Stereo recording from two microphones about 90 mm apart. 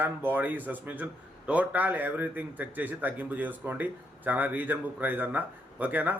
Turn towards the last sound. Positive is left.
turn(degrees=-20)  # may be behind; listen again after turning